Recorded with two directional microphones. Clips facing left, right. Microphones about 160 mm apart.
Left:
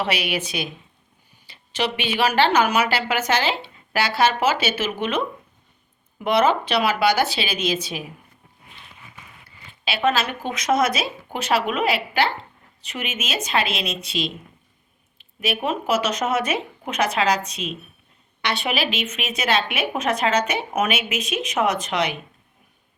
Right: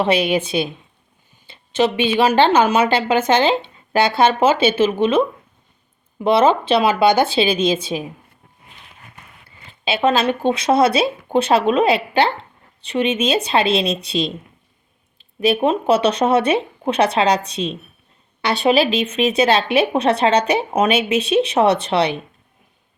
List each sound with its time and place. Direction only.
0.0 s a woman's voice: 30° right (ahead or behind)
6.1 s a woman's voice: 25° right (ahead or behind)
9.9 s a woman's voice: 30° right (ahead or behind)
15.4 s a woman's voice: 30° right (ahead or behind)